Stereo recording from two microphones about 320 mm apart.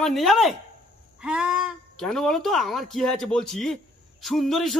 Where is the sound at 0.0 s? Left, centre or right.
Centre.